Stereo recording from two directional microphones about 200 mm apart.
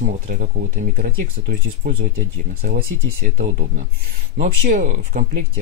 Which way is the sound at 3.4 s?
35° right (ahead or behind).